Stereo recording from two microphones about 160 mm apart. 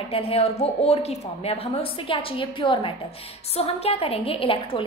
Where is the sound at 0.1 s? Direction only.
40° left (ahead or behind).